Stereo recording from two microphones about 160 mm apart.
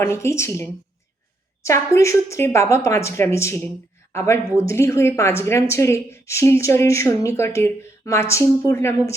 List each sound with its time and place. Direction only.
0.0 s a woman's voice: 15° left (ahead or behind)